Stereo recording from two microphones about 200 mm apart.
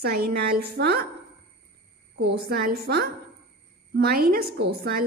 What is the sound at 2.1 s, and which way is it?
A woman's voice, 55° right (ahead or behind).